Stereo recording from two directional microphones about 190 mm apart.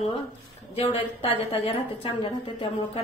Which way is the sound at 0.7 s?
30° left (ahead or behind).